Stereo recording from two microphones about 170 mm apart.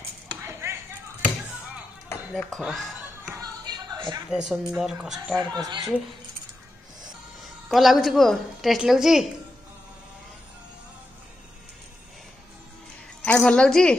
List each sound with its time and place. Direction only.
0.5 s chop: 15° right (ahead or behind)
2.3 s a woman's voice: centre (ahead or behind)
3.3 s a sound: 20° right (ahead or behind)
4.3 s a woman's voice: 5° right (ahead or behind)
5.5 s speech: 25° right (ahead or behind)
7.4 s a woman's voice: centre (ahead or behind)
13.2 s a woman's voice: 5° left (ahead or behind)